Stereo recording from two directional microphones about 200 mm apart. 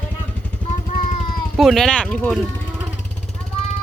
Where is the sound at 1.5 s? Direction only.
Centre (ahead or behind).